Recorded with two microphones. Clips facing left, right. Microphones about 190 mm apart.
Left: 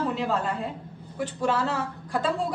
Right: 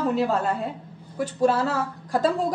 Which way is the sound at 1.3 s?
40° right (ahead or behind).